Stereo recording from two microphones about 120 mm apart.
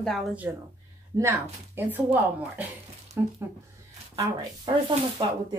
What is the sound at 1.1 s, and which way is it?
Speech, 25° right (ahead or behind).